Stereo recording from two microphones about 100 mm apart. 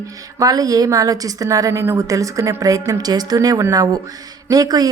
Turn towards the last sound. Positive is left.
turn(degrees=-40)  # may be behind; listen again after turning